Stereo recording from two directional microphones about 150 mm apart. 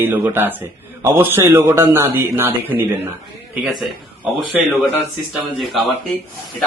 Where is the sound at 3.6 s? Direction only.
Centre (ahead or behind).